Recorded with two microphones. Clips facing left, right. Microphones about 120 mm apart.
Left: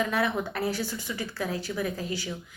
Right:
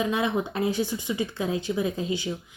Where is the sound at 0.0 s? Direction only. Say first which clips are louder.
Right 2 dB; 20° right (ahead or behind).